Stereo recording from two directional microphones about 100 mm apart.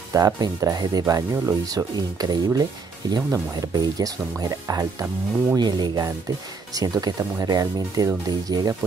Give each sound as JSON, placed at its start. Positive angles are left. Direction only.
{"t": 0.1, "sound": "speech", "side_deg": -35}